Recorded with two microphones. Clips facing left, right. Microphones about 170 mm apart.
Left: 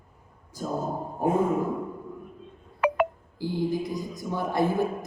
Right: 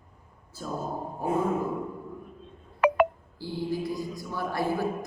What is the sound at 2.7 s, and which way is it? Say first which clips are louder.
Telephone dialing: right 2 dB; 70° right (ahead or behind).